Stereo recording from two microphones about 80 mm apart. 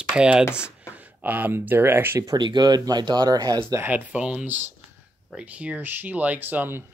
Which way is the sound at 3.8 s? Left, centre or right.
Centre.